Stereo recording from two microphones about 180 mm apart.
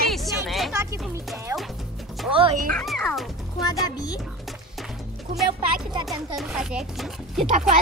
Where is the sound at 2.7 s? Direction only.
5° left (ahead or behind).